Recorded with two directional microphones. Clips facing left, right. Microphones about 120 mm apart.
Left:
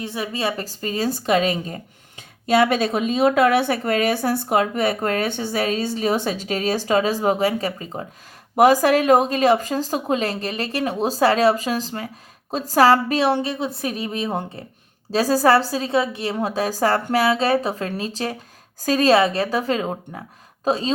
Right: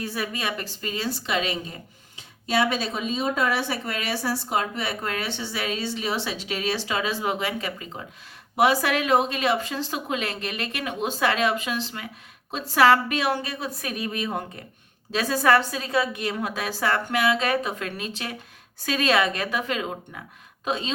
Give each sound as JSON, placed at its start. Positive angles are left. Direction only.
{"t": 0.0, "sound": "a woman's voice", "side_deg": 25}